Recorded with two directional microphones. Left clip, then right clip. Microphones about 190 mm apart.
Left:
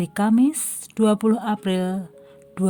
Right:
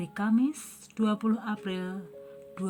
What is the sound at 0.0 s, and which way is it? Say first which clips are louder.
A woman's voice: left 9 dB; 55° left (ahead or behind).